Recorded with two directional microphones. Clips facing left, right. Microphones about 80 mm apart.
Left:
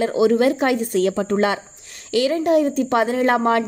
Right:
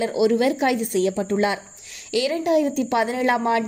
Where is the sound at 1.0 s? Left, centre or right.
Left.